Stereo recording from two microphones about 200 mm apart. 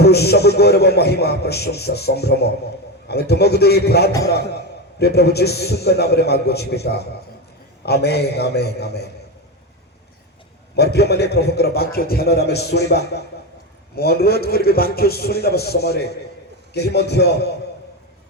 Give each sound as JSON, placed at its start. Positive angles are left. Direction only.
{"t": 0.0, "sound": "a man's voice", "side_deg": 55}
{"t": 10.8, "sound": "a man's voice", "side_deg": 55}